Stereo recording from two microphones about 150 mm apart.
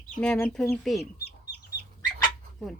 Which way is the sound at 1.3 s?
90° left.